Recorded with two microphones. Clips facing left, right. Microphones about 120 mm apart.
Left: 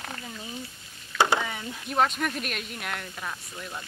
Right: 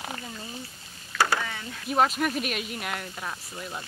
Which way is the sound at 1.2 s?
20° left (ahead or behind).